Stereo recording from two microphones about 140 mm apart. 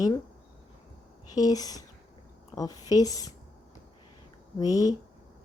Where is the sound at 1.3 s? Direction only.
25° left (ahead or behind).